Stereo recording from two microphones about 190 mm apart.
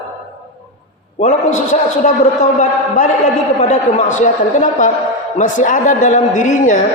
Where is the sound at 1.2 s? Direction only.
40° left (ahead or behind).